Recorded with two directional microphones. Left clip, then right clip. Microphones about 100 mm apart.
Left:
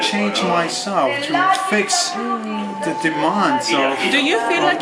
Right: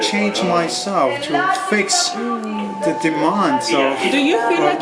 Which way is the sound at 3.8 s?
25° left (ahead or behind).